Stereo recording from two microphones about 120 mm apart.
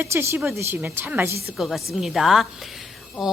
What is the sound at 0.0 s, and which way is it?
A woman's voice, 20° right (ahead or behind).